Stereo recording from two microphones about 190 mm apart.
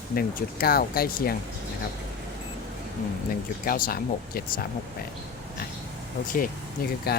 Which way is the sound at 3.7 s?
50° left (ahead or behind).